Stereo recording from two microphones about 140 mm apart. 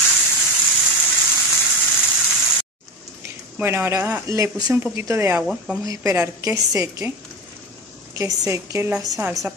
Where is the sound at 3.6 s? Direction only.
15° right (ahead or behind).